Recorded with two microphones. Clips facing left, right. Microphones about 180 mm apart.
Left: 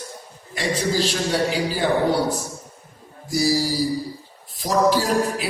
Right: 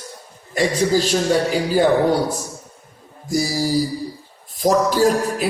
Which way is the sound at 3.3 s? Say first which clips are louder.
Right 1 dB; 45° right (ahead or behind).